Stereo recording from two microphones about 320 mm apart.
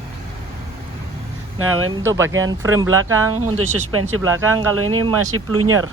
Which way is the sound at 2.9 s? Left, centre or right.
Right.